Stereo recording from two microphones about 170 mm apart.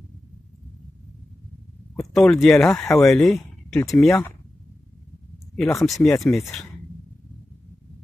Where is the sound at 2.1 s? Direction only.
Centre (ahead or behind).